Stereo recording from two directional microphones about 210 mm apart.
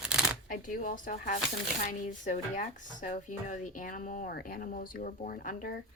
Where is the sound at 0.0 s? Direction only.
5° right (ahead or behind).